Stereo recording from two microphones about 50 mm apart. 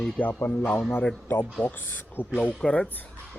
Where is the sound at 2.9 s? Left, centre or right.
Left.